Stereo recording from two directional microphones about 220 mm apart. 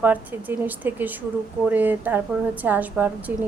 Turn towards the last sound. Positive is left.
turn(degrees=-10)  # may be behind; listen again after turning